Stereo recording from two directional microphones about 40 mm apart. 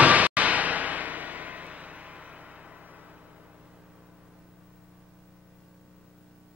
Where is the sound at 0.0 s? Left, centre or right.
Right.